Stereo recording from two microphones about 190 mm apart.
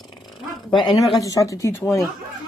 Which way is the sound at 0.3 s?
Centre (ahead or behind).